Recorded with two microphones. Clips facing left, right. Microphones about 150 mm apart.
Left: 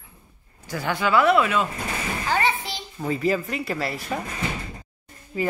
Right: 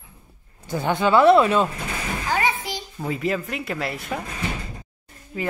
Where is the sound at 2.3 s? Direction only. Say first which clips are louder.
Even; 10° right (ahead or behind).